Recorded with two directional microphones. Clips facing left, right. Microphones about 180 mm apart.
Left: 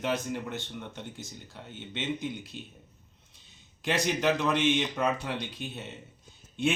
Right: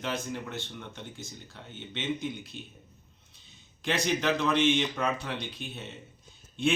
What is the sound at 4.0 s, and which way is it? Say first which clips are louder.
Speech: left 1 dB; 10° left (ahead or behind).